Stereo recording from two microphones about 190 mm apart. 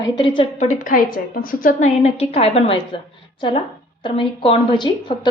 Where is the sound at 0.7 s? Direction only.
45° left (ahead or behind).